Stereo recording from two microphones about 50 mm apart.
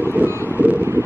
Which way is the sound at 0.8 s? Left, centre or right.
Right.